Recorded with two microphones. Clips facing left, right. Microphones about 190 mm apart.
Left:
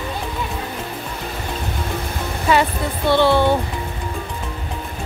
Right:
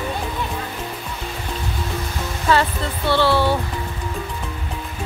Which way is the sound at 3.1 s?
20° left (ahead or behind).